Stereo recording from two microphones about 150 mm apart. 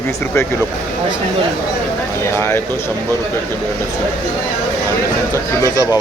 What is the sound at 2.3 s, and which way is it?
Speech, 15° left (ahead or behind).